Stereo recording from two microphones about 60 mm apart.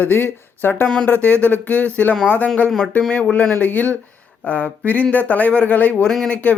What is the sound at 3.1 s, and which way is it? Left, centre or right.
Speech, left.